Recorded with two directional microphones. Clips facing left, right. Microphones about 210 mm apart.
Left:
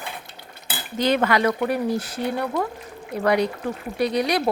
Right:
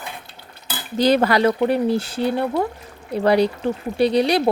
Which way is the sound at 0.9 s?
35° right (ahead or behind).